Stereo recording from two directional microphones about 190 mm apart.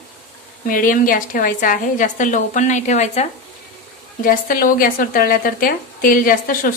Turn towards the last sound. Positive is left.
turn(degrees=45)  # may be behind; listen again after turning